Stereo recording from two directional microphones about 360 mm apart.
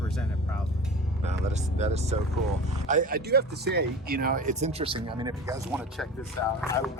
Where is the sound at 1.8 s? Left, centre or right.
Centre.